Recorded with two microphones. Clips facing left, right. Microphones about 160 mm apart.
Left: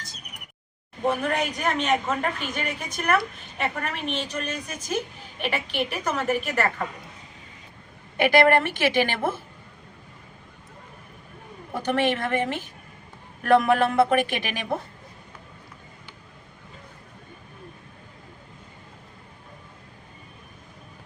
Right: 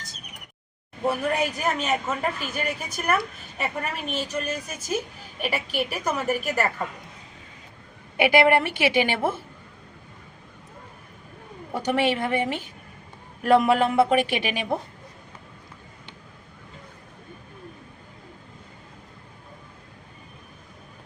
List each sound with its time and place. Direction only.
1.0 s a woman's voice: 10° right (ahead or behind)
8.1 s a woman's voice: 15° right (ahead or behind)
11.7 s a woman's voice: 10° right (ahead or behind)